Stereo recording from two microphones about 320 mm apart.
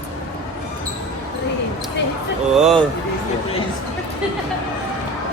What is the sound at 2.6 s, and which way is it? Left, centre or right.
Speech, centre.